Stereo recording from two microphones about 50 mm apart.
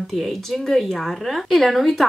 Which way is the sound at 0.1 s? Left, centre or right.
Centre.